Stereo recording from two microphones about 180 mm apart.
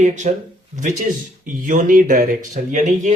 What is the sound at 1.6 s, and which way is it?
Speech, 45° right (ahead or behind).